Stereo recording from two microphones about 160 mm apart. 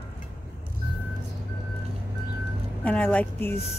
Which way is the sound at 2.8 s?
10° left (ahead or behind).